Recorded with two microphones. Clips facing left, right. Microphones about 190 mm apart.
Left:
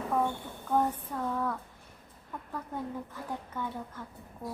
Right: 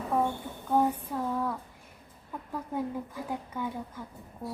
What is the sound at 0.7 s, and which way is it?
A woman's voice, 10° right (ahead or behind).